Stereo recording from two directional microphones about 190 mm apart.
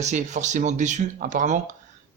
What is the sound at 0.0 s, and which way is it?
Speech, 40° right (ahead or behind).